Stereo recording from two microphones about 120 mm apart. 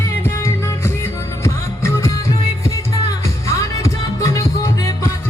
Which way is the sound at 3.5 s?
25° left (ahead or behind).